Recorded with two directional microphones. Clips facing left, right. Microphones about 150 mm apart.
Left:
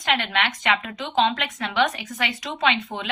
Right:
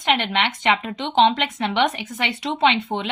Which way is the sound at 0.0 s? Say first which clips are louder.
Right 3 dB; 25° right (ahead or behind).